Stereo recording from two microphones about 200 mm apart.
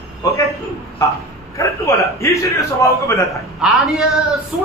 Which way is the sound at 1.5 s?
15° left (ahead or behind).